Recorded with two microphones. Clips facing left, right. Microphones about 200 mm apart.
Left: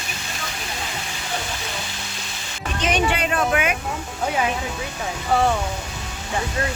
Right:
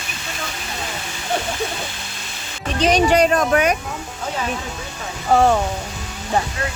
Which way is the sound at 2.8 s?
35° right (ahead or behind).